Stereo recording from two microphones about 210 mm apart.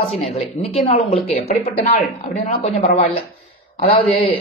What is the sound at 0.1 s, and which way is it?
A man's voice, 30° left (ahead or behind).